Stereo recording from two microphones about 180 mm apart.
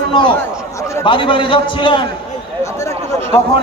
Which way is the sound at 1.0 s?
30° left (ahead or behind).